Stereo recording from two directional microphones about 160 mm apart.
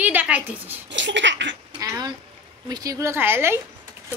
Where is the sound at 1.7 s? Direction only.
20° right (ahead or behind).